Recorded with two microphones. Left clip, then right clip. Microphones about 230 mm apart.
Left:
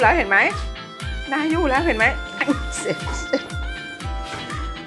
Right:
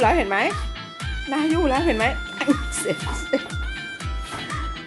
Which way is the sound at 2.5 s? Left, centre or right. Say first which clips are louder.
Right 4 dB; centre.